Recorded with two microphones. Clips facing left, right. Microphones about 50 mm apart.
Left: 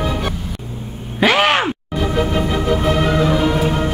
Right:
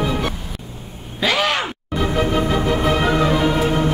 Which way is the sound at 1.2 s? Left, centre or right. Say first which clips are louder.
Left 5 dB; left.